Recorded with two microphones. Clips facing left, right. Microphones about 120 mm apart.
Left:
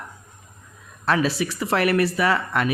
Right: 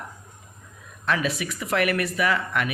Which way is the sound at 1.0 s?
35° left (ahead or behind).